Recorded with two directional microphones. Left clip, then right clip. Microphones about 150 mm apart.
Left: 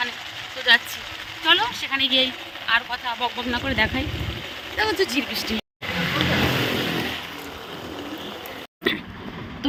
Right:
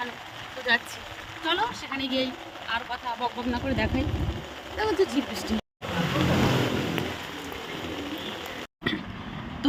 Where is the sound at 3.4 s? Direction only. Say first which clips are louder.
Left 9 dB; 10° right (ahead or behind).